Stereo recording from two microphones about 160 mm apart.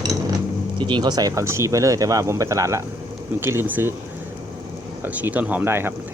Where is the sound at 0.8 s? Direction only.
30° right (ahead or behind); by 3.9 s 15° right (ahead or behind).